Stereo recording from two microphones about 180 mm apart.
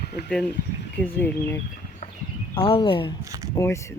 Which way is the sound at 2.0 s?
50° left (ahead or behind).